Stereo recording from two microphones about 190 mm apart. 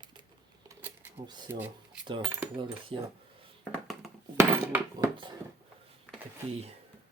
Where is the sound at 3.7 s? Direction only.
Centre (ahead or behind).